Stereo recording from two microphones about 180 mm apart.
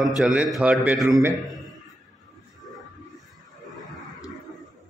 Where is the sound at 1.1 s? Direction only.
20° right (ahead or behind).